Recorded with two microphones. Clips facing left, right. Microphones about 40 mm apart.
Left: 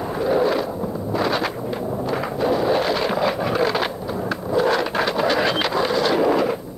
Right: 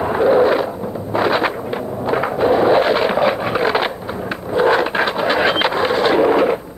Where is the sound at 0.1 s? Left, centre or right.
Right.